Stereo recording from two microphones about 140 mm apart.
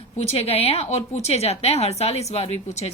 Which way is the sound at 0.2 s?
45° left (ahead or behind).